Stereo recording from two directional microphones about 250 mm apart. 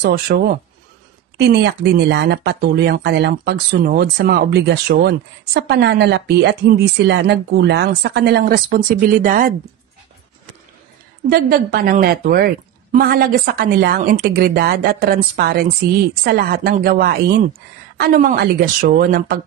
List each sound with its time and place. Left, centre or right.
0.0 s speech: right
11.2 s speech: right